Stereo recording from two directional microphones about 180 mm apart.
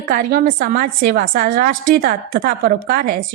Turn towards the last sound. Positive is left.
turn(degrees=-55)  # may be behind; listen again after turning